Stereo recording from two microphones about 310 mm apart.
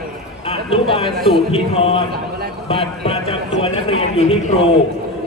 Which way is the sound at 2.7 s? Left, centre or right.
Centre.